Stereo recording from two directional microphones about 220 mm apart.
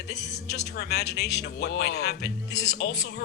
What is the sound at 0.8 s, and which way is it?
A man's voice, 50° left (ahead or behind).